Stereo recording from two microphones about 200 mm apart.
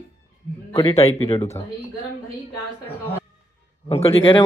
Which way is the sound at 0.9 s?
30° left (ahead or behind).